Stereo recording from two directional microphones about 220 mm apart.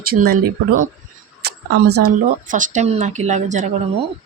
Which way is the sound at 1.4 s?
45° right (ahead or behind).